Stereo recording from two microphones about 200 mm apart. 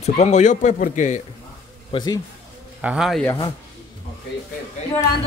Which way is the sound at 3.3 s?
20° left (ahead or behind).